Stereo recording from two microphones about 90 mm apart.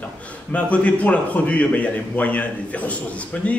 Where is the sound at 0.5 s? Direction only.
15° left (ahead or behind).